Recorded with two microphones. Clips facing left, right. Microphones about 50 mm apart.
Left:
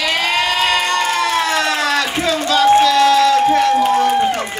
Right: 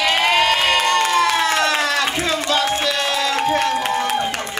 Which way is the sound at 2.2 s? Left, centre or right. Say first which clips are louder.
Left 6 dB; right.